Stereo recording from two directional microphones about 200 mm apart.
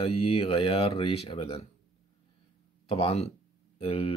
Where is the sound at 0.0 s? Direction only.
30° left (ahead or behind).